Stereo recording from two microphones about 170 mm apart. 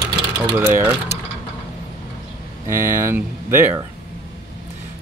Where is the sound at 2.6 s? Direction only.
15° right (ahead or behind).